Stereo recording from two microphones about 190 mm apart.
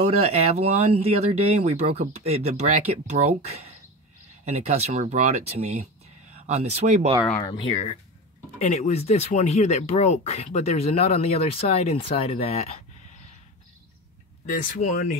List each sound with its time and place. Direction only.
0.2 s speech: 35° right (ahead or behind)
7.3 s speech: 25° left (ahead or behind)
14.4 s speech: 45° left (ahead or behind)